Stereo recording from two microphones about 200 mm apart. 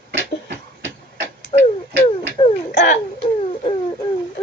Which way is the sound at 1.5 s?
25° left (ahead or behind).